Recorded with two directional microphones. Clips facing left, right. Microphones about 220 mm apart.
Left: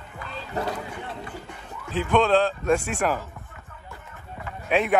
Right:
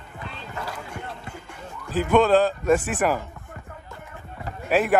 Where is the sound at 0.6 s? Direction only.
35° left (ahead or behind).